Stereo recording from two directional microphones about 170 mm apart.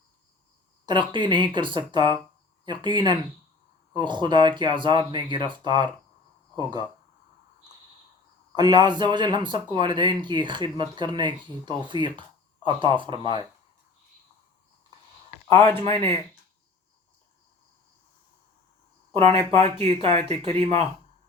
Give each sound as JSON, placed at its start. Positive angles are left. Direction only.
{"t": 0.9, "sound": "speech", "side_deg": -25}
{"t": 8.5, "sound": "speech", "side_deg": -25}
{"t": 15.9, "sound": "speech", "side_deg": 10}
{"t": 19.1, "sound": "speech", "side_deg": -35}